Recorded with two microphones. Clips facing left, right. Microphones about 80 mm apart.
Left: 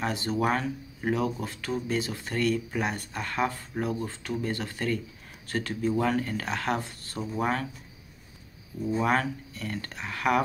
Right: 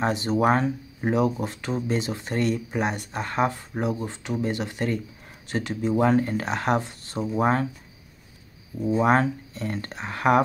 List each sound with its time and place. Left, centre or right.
0.0 s speech: right
8.8 s speech: right